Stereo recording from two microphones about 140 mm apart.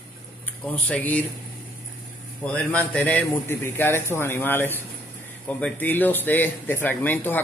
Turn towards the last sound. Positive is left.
turn(degrees=15)  # may be behind; listen again after turning